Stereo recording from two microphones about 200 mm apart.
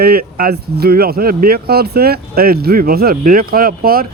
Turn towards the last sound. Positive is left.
turn(degrees=-45)  # may be behind; listen again after turning